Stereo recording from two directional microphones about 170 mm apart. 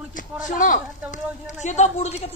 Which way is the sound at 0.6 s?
50° left (ahead or behind).